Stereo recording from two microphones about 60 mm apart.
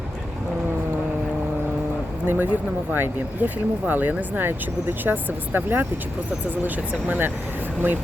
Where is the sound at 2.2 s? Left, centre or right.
Right.